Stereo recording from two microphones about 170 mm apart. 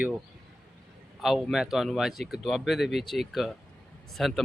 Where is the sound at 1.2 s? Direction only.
Centre (ahead or behind).